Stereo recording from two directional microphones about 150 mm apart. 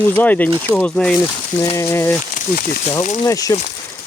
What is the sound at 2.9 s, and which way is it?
Speech, 50° left (ahead or behind).